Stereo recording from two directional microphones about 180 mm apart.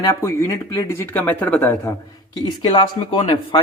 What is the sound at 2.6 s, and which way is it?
Speech, 30° left (ahead or behind).